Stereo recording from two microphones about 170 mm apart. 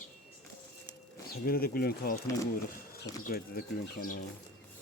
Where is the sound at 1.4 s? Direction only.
60° left (ahead or behind).